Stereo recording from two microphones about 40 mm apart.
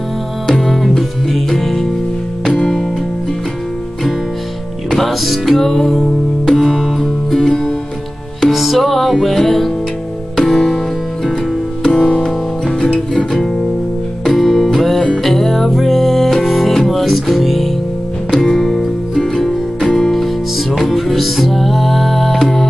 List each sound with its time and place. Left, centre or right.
0.5 s music: centre
2.4 s music: centre
4.9 s music: centre
8.5 s music: centre
11.8 s music: centre
14.3 s music: centre